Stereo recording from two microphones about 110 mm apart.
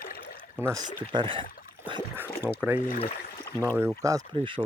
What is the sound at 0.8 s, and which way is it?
Speech, 45° right (ahead or behind).